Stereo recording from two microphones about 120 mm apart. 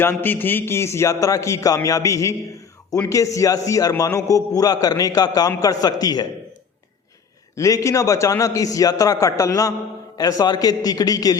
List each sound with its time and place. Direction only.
0.0 s a man's voice: 15° left (ahead or behind)
7.5 s a man's voice: 25° left (ahead or behind)